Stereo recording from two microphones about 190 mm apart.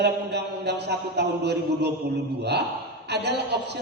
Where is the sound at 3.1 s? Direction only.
60° right (ahead or behind).